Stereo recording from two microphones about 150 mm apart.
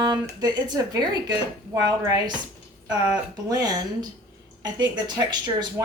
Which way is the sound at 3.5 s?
25° right (ahead or behind).